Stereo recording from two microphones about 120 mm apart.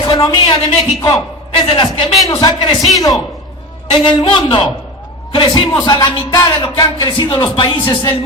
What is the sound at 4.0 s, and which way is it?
Speech, 45° left (ahead or behind).